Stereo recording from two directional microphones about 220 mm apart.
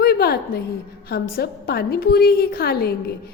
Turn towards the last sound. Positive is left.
turn(degrees=45)  # may be behind; listen again after turning